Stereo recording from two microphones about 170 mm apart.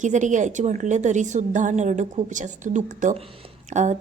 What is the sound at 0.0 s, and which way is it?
A woman's voice, 45° right (ahead or behind).